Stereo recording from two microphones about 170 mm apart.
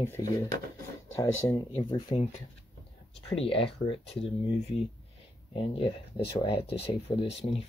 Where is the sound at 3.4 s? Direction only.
30° left (ahead or behind).